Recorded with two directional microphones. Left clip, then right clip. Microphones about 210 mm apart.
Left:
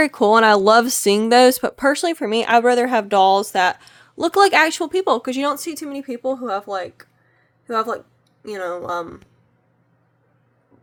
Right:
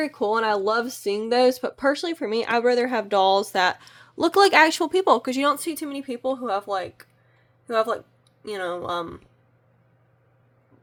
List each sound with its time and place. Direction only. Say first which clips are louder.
0.0 s speech: left 9 dB; 30° left (ahead or behind); by 9.2 s 5° left (ahead or behind)